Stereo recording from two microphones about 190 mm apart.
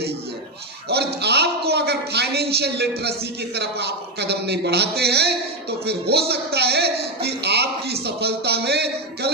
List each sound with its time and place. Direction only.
0.9 s a man's voice: 60° right (ahead or behind)